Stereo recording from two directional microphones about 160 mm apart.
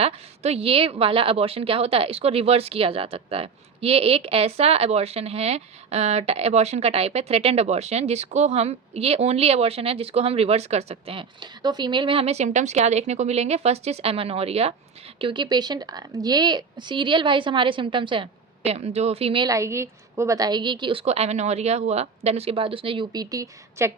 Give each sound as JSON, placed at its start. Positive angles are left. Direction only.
{"t": 0.0, "sound": "a woman's voice", "side_deg": -40}
{"t": 19.5, "sound": "a woman's voice", "side_deg": -20}